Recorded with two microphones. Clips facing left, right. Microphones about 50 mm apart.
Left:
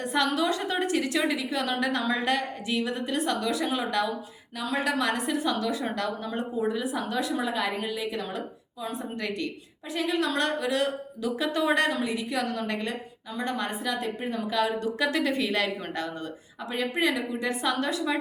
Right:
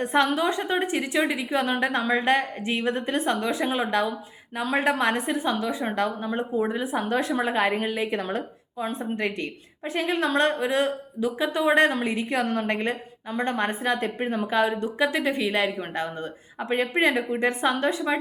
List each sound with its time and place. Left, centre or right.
0.0 s a woman's voice: right
11.9 s a woman's voice: right
16.6 s a woman's voice: right